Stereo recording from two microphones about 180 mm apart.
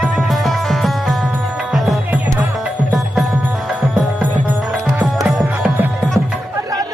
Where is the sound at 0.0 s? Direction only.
Centre (ahead or behind).